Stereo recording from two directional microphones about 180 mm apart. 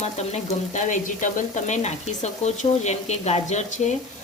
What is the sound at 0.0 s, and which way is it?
Speech, 35° left (ahead or behind).